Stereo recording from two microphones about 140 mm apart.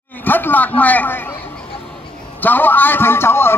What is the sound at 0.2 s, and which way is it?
A man's voice, 15° left (ahead or behind).